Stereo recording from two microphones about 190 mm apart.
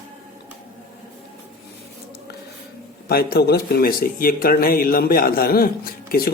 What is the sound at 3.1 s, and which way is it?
Speech, 55° left (ahead or behind).